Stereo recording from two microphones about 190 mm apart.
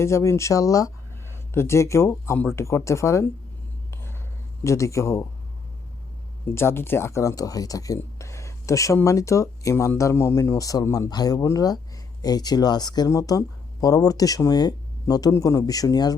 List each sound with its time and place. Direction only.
0.0 s speech: 15° left (ahead or behind)
3.9 s a sound: 10° left (ahead or behind)
4.6 s speech: 15° left (ahead or behind)
6.5 s speech: 15° left (ahead or behind)